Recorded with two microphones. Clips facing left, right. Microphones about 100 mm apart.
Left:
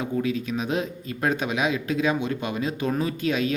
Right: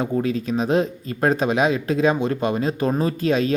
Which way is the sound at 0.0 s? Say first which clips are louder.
Right 4 dB; 40° right (ahead or behind).